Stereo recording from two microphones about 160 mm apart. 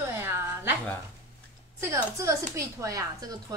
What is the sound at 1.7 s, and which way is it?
Speech, 20° right (ahead or behind).